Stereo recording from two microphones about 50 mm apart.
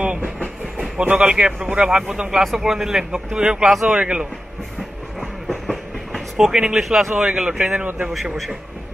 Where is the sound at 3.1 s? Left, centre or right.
Centre.